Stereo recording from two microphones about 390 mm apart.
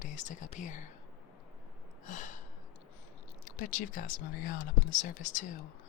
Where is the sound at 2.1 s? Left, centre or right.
Centre.